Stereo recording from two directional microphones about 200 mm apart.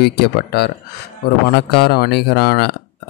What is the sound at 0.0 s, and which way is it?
Speech, 55° left (ahead or behind).